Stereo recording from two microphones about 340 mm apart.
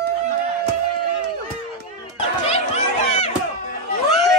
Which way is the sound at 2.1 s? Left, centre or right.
Centre.